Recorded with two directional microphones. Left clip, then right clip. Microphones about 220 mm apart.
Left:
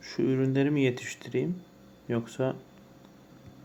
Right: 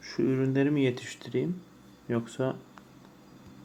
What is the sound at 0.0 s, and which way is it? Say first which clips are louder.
Speech: even; 5° left (ahead or behind).